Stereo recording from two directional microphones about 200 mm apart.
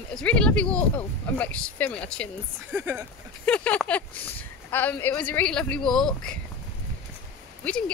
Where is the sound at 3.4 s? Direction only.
5° left (ahead or behind).